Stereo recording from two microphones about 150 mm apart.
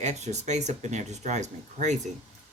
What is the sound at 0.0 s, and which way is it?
Speech, 50° right (ahead or behind).